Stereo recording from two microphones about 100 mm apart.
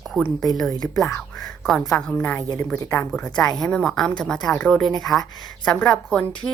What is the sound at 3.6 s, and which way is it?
A woman's voice, 5° left (ahead or behind).